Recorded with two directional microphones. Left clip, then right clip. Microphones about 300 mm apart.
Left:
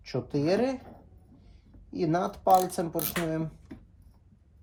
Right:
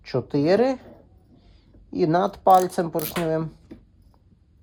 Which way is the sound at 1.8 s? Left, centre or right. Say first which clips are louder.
Right 7 dB; right.